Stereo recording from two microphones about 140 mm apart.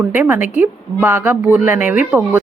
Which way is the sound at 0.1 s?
10° right (ahead or behind).